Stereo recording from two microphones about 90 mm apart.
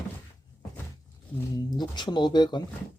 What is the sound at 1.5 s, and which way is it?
Speech, 50° left (ahead or behind).